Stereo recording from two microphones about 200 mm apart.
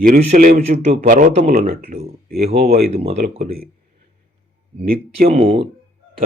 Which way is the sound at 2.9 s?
30° right (ahead or behind).